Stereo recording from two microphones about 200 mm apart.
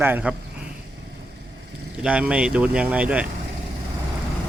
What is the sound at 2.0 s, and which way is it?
Speech, 5° right (ahead or behind).